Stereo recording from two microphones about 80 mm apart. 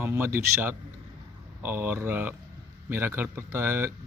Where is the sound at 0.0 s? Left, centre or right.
Right.